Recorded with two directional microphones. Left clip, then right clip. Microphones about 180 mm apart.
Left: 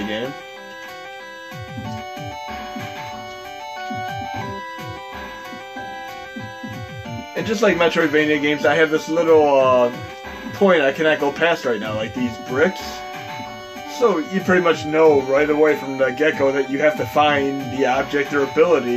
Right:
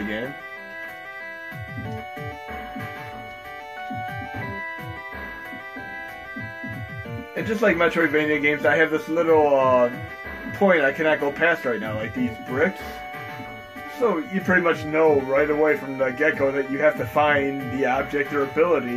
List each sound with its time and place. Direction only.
7.4 s a man's voice: 30° left (ahead or behind)
13.9 s a man's voice: 30° left (ahead or behind)